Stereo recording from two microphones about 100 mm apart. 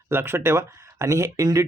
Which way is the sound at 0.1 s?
25° right (ahead or behind).